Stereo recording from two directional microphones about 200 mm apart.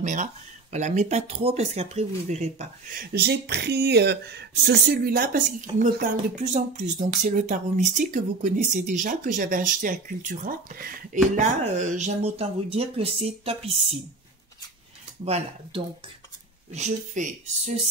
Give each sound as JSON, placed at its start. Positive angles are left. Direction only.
{"t": 0.0, "sound": "speech", "side_deg": -35}
{"t": 2.9, "sound": "speech", "side_deg": -50}
{"t": 15.2, "sound": "speech", "side_deg": -30}